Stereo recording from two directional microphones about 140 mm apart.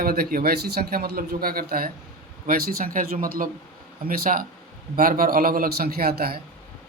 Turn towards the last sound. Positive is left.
turn(degrees=-90)